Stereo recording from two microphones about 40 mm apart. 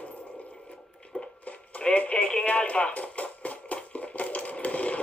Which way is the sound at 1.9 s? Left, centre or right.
Left.